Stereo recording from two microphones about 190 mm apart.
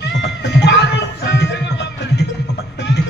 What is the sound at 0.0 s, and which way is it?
Cat, 65° left (ahead or behind).